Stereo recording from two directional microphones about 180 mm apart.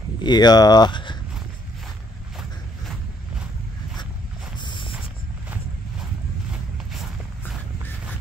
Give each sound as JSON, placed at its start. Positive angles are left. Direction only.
{"t": 0.2, "sound": "speech", "side_deg": 25}
{"t": 4.6, "sound": "a sound", "side_deg": 25}
{"t": 6.9, "sound": "walk", "side_deg": 0}